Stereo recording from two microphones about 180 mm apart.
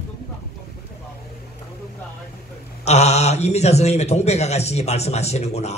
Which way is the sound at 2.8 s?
35° left (ahead or behind).